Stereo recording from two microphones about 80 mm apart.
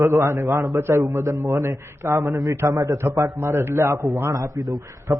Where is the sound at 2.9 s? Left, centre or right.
Right.